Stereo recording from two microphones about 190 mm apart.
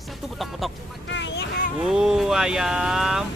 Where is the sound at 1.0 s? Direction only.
70° left (ahead or behind).